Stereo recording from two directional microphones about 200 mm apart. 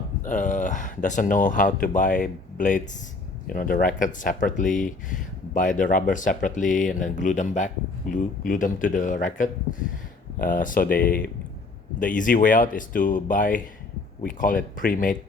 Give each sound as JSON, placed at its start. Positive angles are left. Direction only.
{"t": 0.2, "sound": "speech", "side_deg": 40}
{"t": 12.1, "sound": "speech", "side_deg": 40}